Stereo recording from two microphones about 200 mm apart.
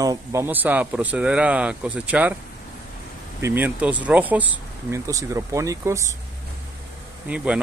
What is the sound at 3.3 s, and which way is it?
Speech, 10° right (ahead or behind).